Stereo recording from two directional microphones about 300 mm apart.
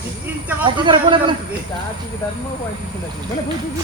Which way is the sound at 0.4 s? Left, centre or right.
Centre.